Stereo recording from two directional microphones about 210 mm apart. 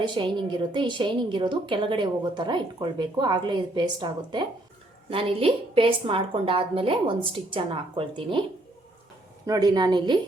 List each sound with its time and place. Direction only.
0.0 s a woman's voice: 20° right (ahead or behind)
9.5 s a woman's voice: 20° right (ahead or behind)